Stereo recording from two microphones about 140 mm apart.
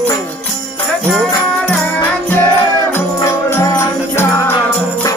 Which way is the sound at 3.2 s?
20° left (ahead or behind).